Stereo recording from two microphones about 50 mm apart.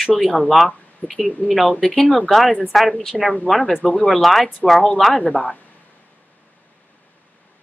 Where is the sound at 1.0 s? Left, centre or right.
Left.